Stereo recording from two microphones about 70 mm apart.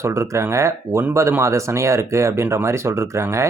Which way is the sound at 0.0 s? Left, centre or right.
Right.